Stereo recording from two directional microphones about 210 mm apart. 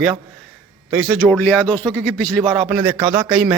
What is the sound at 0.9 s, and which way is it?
Speech, 5° right (ahead or behind).